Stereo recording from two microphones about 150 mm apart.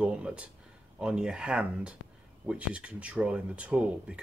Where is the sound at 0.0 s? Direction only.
10° right (ahead or behind).